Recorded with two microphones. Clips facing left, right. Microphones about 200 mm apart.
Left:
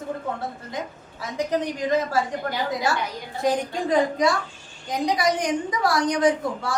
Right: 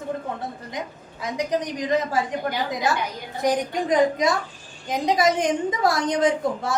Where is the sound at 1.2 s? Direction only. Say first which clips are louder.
Even; 15° right (ahead or behind).